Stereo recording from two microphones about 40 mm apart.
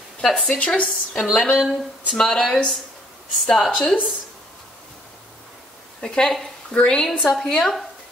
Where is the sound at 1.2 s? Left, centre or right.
Centre.